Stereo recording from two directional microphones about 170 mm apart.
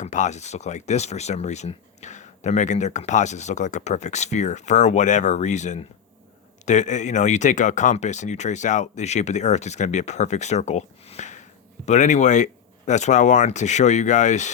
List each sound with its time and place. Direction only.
0.0 s speech: 45° left (ahead or behind)